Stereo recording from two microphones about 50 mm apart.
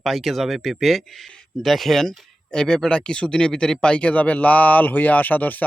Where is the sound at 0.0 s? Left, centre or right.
Centre.